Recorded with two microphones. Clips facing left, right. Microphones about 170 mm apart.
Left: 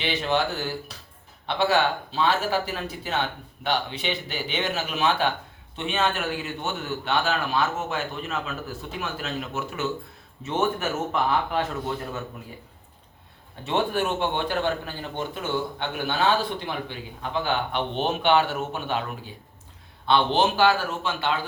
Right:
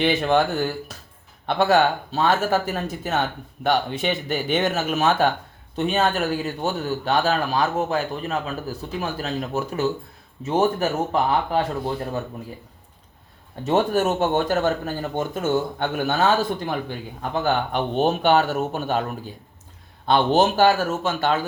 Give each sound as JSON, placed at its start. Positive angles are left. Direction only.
{"t": 0.0, "sound": "a man's voice", "side_deg": -50}
{"t": 13.7, "sound": "a man's voice", "side_deg": -40}